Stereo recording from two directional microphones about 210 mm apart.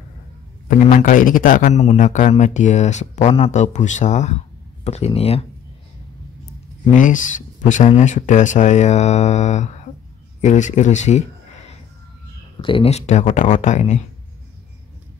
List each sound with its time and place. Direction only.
0.7 s a man's voice: 35° left (ahead or behind)
6.8 s a man's voice: 35° left (ahead or behind)